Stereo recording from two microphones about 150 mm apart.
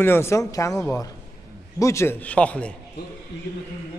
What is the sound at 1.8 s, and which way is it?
Speech, 20° left (ahead or behind).